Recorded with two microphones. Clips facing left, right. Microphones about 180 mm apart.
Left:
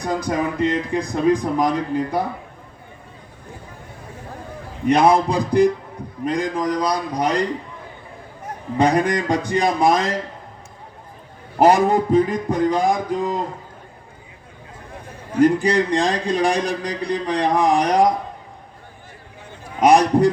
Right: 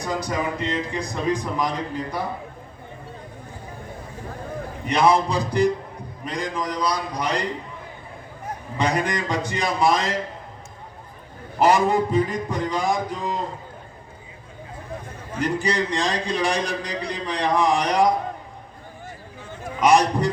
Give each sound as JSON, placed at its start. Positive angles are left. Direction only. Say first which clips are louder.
{"t": 0.0, "sound": "a man's voice", "louder": "left 4 dB", "side_deg": 55}
{"t": 4.9, "sound": "a man's voice", "louder": "left 4 dB", "side_deg": 50}
{"t": 8.8, "sound": "a man's voice", "louder": "left 6 dB", "side_deg": 55}
{"t": 11.6, "sound": "a man's voice", "louder": "left 3 dB", "side_deg": 50}
{"t": 15.4, "sound": "a man's voice", "louder": "left 8 dB", "side_deg": 50}
{"t": 19.8, "sound": "a man's voice", "louder": "left 4 dB", "side_deg": 50}